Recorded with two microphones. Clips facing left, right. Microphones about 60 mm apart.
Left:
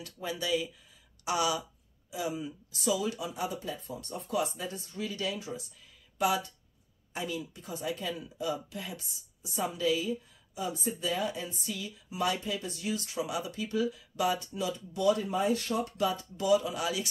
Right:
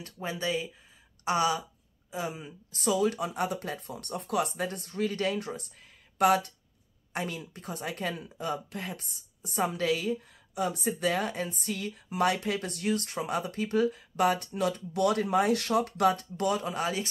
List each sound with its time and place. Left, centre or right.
0.0 s speech: right
2.8 s speech: right